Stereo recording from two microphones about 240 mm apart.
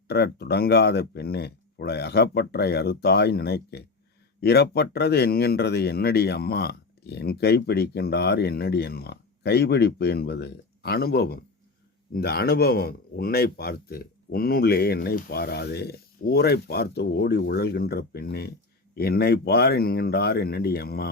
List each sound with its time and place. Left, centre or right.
0.1 s speech: left